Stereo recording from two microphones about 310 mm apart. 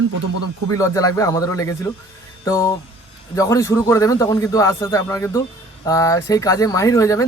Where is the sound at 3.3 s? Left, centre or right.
Centre.